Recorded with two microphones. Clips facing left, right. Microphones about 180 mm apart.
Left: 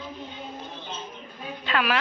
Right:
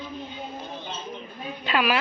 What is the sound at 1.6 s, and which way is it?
Speech, 10° right (ahead or behind).